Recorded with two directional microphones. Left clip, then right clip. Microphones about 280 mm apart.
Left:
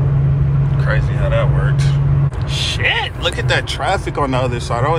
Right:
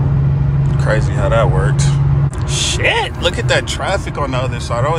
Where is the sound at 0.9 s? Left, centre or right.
Right.